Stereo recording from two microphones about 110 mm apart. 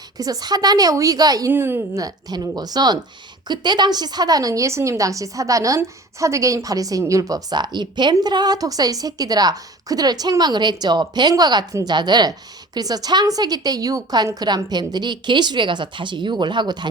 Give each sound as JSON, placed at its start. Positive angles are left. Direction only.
{"t": 0.2, "sound": "a woman's voice", "side_deg": -35}
{"t": 1.5, "sound": "a woman's voice", "side_deg": -20}
{"t": 2.0, "sound": "a woman's voice", "side_deg": -35}